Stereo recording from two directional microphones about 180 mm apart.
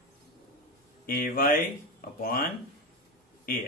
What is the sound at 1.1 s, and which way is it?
Speech, 55° left (ahead or behind).